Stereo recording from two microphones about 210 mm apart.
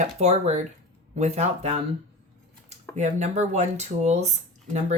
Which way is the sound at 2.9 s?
35° right (ahead or behind).